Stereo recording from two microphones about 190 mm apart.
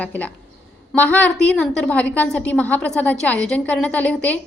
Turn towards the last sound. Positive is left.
turn(degrees=5)  # may be behind; listen again after turning